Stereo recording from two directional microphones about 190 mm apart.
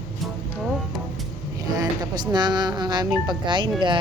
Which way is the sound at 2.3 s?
25° right (ahead or behind).